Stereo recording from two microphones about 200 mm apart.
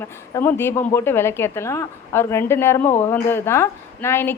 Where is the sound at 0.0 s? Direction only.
10° left (ahead or behind).